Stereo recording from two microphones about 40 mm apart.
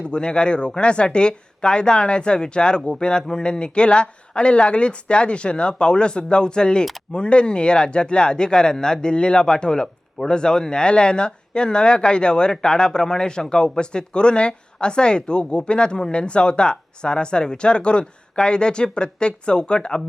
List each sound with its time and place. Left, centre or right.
0.1 s speech: left